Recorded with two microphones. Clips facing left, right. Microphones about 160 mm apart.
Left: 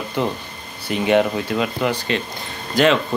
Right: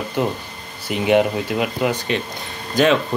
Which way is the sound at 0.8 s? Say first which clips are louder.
Right 1 dB; 15° right (ahead or behind).